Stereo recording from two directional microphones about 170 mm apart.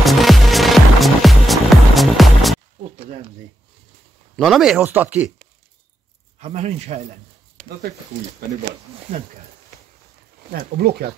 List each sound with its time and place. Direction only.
0.0 s music: centre (ahead or behind)
4.4 s speech: centre (ahead or behind)
6.4 s speech: 40° right (ahead or behind)
10.5 s speech: 65° right (ahead or behind)